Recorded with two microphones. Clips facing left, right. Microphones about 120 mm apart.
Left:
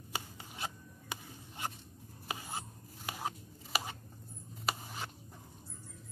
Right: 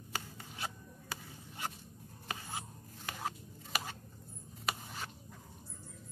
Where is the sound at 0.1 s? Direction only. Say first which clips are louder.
Left 1 dB; 15° left (ahead or behind).